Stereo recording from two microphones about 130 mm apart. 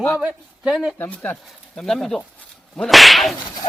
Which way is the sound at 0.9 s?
15° left (ahead or behind).